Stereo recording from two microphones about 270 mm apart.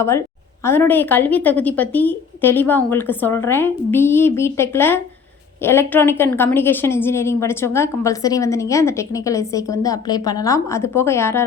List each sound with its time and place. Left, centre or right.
0.6 s a woman's voice: centre